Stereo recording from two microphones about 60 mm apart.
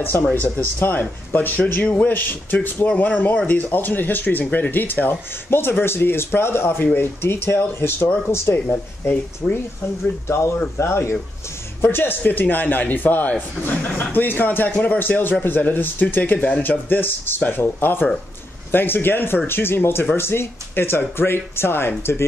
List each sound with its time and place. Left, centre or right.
0.3 s speech: left
9.4 s speech: centre
10.2 s speech: left